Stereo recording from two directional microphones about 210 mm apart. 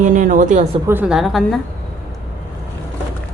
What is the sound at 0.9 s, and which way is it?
Speech, 5° right (ahead or behind).